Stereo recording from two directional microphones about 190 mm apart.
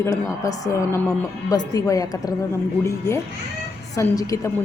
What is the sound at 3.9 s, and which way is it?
Speech, 15° left (ahead or behind).